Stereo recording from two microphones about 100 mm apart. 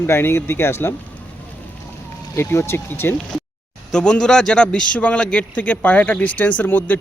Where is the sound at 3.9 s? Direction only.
5° left (ahead or behind).